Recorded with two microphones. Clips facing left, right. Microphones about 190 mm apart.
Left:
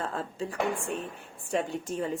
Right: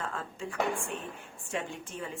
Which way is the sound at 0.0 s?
35° left (ahead or behind).